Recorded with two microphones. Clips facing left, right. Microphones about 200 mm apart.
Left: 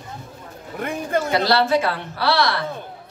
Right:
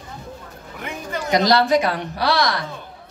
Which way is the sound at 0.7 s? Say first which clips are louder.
Left 6 dB; 50° left (ahead or behind).